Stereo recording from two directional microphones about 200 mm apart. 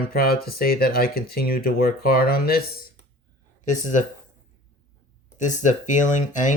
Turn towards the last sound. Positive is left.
turn(degrees=40)  # may be behind; listen again after turning